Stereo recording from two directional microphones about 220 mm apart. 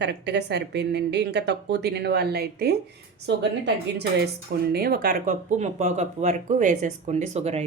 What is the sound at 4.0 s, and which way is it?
Speech, 45° right (ahead or behind).